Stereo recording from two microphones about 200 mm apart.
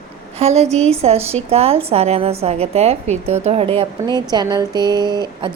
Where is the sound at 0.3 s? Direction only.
30° right (ahead or behind).